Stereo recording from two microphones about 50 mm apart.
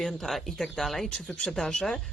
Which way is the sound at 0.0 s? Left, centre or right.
Centre.